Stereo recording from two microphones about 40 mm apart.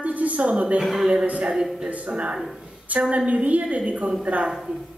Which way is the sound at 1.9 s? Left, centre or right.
Right.